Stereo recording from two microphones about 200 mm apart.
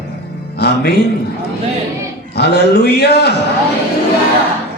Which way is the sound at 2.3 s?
55° left (ahead or behind).